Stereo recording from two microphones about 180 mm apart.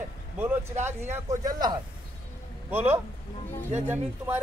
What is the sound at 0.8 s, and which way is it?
Speech, 15° right (ahead or behind).